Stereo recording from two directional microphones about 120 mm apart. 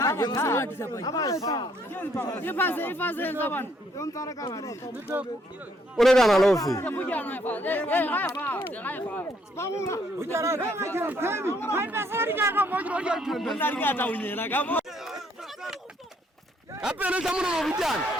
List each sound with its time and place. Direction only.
0.0 s a sound: 30° left (ahead or behind)
0.4 s speech: 20° left (ahead or behind)
1.9 s speech: 15° left (ahead or behind)
6.0 s a man's voice: 5° left (ahead or behind)
6.8 s speech: 15° left (ahead or behind)
10.2 s speech: 25° right (ahead or behind); by 13.6 s centre (ahead or behind)
13.6 s speech: 15° left (ahead or behind)
16.8 s speech: 10° right (ahead or behind)